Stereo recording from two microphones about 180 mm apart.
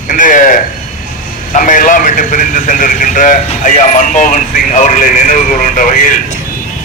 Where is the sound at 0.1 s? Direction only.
45° left (ahead or behind).